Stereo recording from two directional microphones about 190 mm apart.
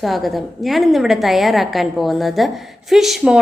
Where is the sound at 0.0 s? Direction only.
Centre (ahead or behind).